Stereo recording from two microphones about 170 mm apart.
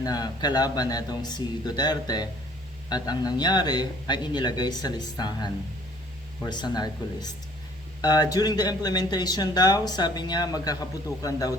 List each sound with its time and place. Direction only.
0.0 s speech: 25° left (ahead or behind)